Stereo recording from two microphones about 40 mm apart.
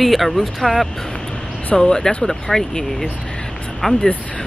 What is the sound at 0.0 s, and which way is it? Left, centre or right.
Speech, centre.